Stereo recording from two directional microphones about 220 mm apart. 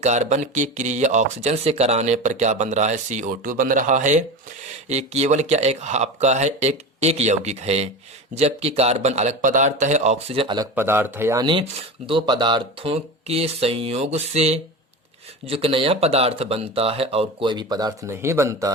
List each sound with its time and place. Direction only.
0.0 s speech: 30° right (ahead or behind)
10.8 s speech: 10° right (ahead or behind)